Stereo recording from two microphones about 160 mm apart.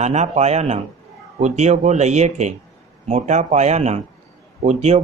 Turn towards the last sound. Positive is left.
turn(degrees=-45)  # may be behind; listen again after turning